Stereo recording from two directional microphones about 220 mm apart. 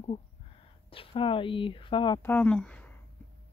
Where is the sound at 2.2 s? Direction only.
5° left (ahead or behind).